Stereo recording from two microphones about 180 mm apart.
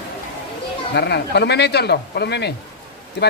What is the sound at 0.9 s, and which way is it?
Speech, 70° left (ahead or behind).